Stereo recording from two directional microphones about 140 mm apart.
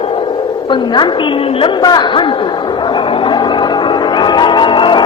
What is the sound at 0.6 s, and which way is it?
A woman's voice, 35° left (ahead or behind).